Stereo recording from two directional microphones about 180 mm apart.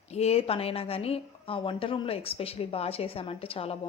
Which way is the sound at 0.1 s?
35° left (ahead or behind).